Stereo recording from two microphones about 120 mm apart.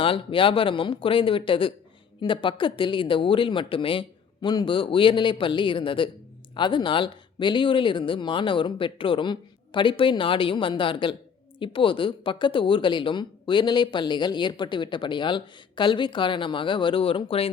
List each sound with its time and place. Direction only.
0.0 s speech: 45° left (ahead or behind)